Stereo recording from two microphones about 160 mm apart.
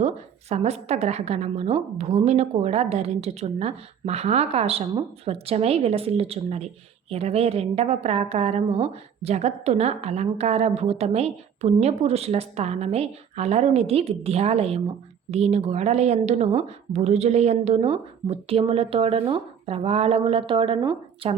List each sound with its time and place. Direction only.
0.0 s a woman's voice: 40° right (ahead or behind)